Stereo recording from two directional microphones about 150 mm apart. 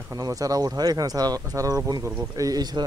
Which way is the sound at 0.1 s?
25° right (ahead or behind).